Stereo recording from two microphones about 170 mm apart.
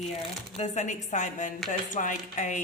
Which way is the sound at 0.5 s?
40° left (ahead or behind).